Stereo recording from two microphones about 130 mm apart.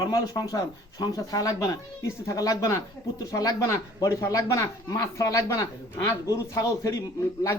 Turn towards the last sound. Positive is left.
turn(degrees=25)  # may be behind; listen again after turning